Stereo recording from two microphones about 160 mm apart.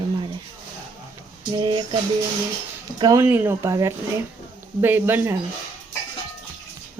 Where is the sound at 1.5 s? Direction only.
25° right (ahead or behind).